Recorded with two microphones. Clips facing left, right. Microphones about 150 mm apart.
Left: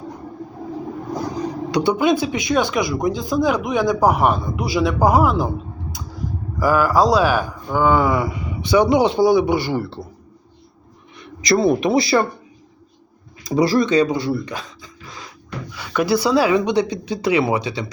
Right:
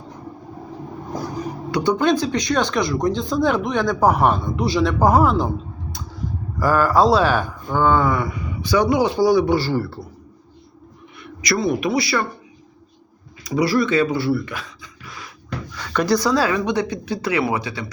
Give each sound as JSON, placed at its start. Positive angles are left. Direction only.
{"t": 1.7, "sound": "speech", "side_deg": 10}
{"t": 6.6, "sound": "speech", "side_deg": 5}
{"t": 8.3, "sound": "a man's voice", "side_deg": 20}
{"t": 11.4, "sound": "a man's voice", "side_deg": 30}
{"t": 13.6, "sound": "speech", "side_deg": 20}
{"t": 15.7, "sound": "speech", "side_deg": 10}